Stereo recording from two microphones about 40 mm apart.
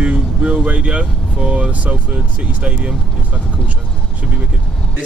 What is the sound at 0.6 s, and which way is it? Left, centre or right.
Speech, right.